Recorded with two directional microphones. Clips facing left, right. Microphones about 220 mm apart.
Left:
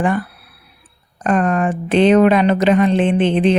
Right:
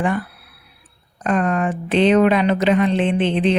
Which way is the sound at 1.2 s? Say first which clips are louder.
Left 3 dB; 45° left (ahead or behind).